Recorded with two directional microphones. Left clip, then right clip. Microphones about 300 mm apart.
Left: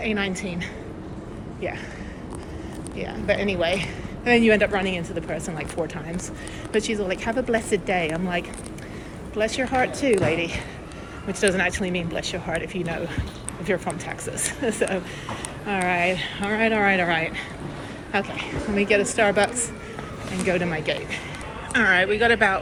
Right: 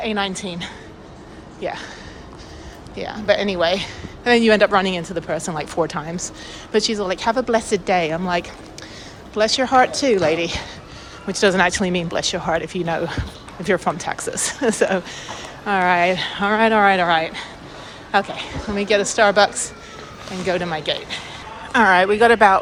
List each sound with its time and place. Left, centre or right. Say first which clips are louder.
0.0 s a woman's voice: right 3 dB; centre
3.0 s a woman's voice: right 5 dB; centre